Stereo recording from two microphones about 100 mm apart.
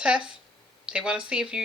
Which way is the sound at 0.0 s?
10° right (ahead or behind).